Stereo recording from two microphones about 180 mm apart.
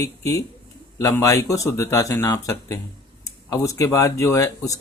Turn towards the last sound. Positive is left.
turn(degrees=20)  # may be behind; listen again after turning